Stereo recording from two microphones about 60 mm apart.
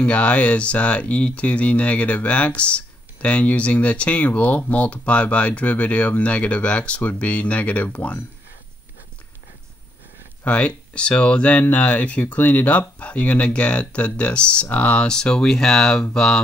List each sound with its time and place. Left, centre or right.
0.0 s speech: left
10.4 s speech: left
15.0 s speech: centre